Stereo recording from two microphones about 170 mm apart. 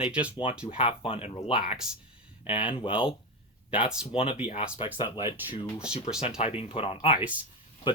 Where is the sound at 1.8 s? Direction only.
5° right (ahead or behind).